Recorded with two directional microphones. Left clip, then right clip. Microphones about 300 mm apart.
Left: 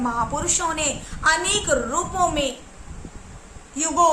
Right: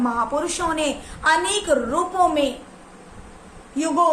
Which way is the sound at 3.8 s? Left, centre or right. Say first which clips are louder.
Even; centre.